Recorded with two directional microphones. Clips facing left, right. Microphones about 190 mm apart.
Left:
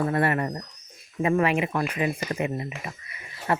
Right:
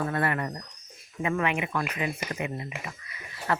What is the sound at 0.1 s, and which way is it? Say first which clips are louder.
Speech: left 4 dB; 30° left (ahead or behind).